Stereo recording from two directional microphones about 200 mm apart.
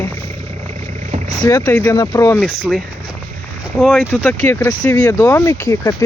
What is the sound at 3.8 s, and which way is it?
Speech, centre (ahead or behind).